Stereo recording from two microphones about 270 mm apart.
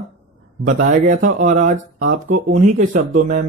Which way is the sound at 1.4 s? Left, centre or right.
Right.